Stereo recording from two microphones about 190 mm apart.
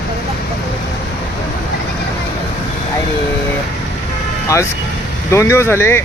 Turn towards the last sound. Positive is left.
turn(degrees=15)  # may be behind; listen again after turning